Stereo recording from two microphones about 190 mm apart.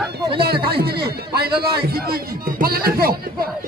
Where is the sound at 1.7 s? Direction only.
55° right (ahead or behind).